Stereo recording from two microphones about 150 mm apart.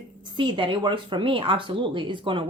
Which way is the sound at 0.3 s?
35° right (ahead or behind).